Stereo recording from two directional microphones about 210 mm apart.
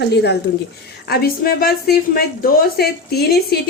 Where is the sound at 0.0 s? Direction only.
50° left (ahead or behind).